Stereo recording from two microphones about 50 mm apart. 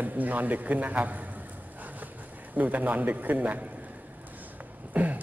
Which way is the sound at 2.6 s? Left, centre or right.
Right.